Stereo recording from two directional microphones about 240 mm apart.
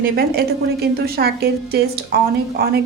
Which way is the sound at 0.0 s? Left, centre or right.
Right.